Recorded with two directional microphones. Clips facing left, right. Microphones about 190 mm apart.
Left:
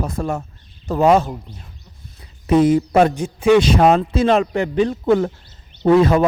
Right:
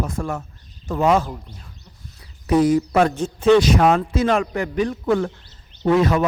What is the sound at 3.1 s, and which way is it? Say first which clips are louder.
Speech: left 1 dB; 10° left (ahead or behind).